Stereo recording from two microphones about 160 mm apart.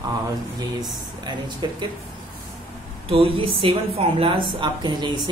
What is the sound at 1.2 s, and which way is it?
Speech, 30° right (ahead or behind).